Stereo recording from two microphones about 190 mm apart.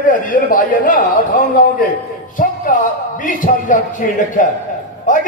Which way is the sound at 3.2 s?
45° left (ahead or behind).